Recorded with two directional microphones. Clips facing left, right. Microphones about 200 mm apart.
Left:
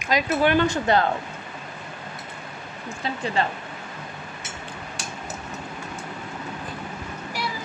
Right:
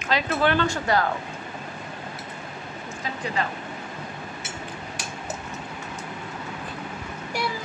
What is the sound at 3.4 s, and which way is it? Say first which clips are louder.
Speech: left 4 dB; 30° left (ahead or behind).